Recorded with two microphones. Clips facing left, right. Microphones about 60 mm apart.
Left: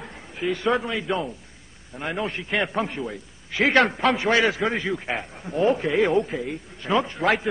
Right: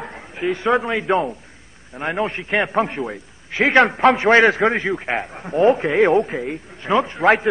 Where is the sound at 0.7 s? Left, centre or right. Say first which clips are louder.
Right 7 dB; right.